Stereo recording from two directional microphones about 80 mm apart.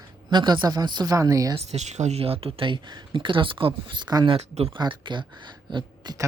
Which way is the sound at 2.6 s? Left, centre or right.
Right.